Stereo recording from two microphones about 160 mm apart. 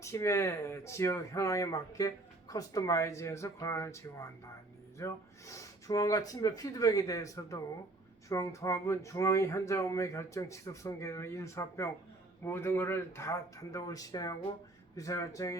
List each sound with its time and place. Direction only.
0.0 s speech: 20° left (ahead or behind)